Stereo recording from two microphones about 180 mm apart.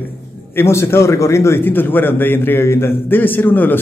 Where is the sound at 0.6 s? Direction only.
15° left (ahead or behind).